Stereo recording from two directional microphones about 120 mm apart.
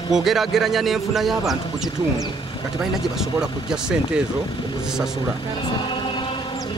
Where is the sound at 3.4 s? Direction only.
5° right (ahead or behind).